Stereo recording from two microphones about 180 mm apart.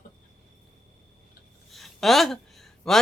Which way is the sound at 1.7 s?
Centre (ahead or behind).